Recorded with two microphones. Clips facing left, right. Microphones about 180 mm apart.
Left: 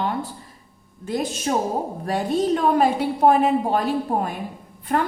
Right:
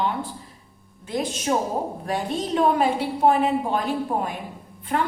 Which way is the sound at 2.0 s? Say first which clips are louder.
Left 5 dB; 40° left (ahead or behind).